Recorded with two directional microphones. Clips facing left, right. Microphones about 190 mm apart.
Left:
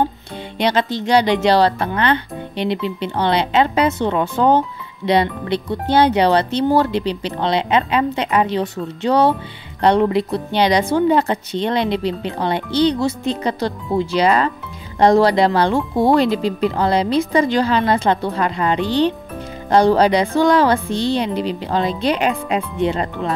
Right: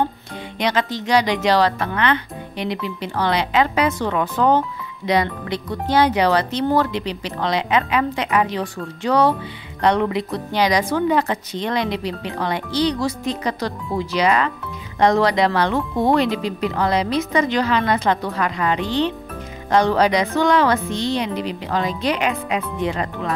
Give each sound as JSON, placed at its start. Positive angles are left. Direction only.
{"t": 0.6, "sound": "speech", "side_deg": 30}